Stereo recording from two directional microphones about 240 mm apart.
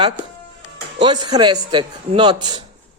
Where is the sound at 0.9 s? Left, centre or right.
Centre.